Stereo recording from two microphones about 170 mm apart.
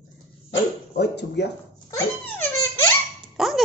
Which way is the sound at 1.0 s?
80° left.